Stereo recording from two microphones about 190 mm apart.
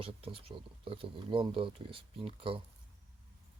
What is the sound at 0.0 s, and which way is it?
Speech, 30° right (ahead or behind).